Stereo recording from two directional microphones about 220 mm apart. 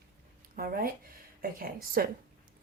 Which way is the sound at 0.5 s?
40° right (ahead or behind).